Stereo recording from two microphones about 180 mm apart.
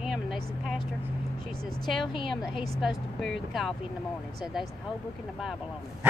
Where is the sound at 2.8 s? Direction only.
Centre (ahead or behind).